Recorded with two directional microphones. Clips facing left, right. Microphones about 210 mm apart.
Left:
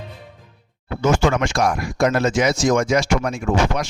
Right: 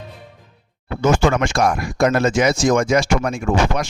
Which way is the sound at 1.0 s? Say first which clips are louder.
Right 1 dB; 50° right (ahead or behind).